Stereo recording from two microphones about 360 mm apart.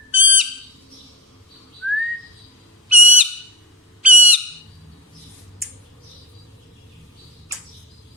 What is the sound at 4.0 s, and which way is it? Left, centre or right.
Squawk, centre.